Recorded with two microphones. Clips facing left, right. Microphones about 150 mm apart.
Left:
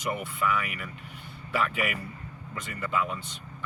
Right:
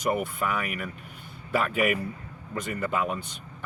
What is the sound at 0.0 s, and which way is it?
Speech, 45° right (ahead or behind).